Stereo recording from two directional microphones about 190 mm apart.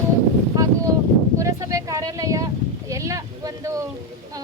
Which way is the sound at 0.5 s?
20° right (ahead or behind).